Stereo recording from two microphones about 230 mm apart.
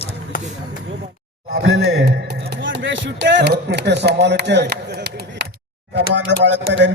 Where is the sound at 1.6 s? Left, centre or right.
Right.